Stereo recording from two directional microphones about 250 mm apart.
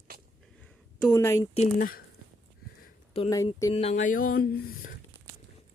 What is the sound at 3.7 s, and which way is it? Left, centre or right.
Speech, left.